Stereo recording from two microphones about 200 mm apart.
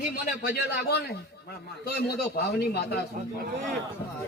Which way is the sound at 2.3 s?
55° left (ahead or behind).